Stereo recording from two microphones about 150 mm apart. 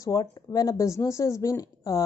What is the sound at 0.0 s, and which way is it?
Speech, 25° left (ahead or behind).